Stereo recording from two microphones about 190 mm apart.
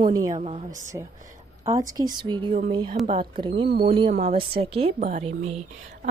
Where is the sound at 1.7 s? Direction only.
20° right (ahead or behind).